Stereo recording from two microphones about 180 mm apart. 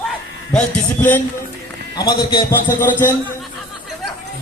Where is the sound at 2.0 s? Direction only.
20° left (ahead or behind).